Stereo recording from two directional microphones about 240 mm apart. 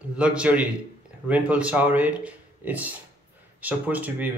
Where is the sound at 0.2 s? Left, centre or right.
Centre.